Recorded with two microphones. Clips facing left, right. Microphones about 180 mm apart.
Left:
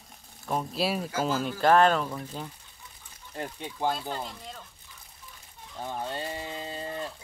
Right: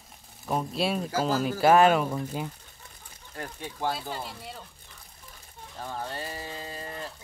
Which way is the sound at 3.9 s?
5° right (ahead or behind).